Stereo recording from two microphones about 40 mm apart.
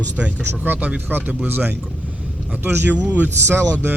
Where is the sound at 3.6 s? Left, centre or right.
Left.